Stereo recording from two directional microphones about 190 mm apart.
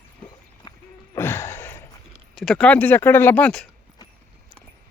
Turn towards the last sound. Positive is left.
turn(degrees=5)  # may be behind; listen again after turning